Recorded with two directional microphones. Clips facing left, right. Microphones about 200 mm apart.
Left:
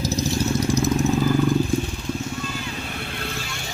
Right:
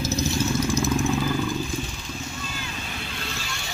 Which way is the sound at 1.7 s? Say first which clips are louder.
Left 7 dB; 60° left (ahead or behind).